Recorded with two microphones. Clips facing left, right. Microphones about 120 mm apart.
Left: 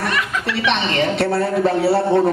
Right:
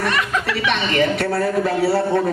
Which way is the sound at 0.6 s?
25° left (ahead or behind).